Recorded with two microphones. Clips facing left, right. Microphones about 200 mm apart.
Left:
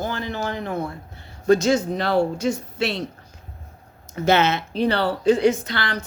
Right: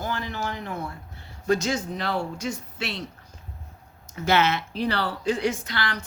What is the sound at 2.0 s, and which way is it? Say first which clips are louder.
Speech: left 8 dB; 70° left (ahead or behind).